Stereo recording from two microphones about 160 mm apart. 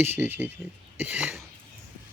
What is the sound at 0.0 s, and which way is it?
Speech, 10° right (ahead or behind).